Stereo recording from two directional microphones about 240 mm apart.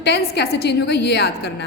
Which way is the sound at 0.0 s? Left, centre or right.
Left.